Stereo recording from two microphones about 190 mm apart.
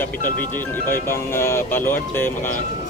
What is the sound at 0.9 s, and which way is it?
A man's voice, 10° left (ahead or behind).